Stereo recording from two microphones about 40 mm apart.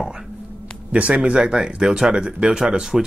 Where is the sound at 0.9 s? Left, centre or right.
Right.